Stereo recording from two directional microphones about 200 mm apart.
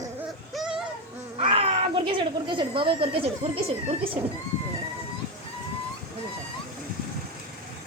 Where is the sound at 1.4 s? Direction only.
25° right (ahead or behind).